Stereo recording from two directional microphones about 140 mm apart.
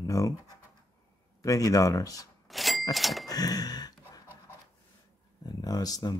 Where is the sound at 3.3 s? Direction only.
30° left (ahead or behind).